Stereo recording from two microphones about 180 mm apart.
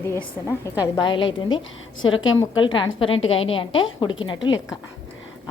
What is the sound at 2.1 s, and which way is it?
Speech, 90° left.